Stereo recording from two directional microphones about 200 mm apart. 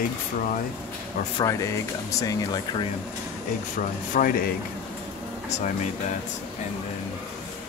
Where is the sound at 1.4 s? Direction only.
15° left (ahead or behind).